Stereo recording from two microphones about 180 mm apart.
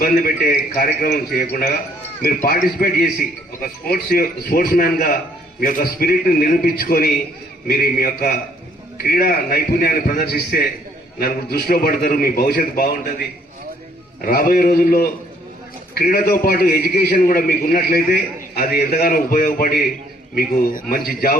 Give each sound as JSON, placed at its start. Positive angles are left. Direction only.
{"t": 0.0, "sound": "a man's voice", "side_deg": 55}